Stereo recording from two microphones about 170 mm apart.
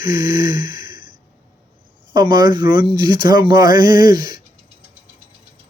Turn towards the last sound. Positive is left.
turn(degrees=-25)  # may be behind; listen again after turning